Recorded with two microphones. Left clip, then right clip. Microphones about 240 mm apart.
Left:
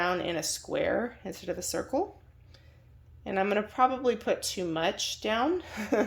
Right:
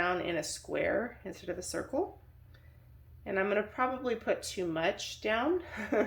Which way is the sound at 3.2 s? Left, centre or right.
Left.